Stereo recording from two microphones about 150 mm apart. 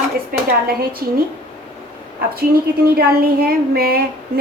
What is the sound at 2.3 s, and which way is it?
A woman's voice, 80° right.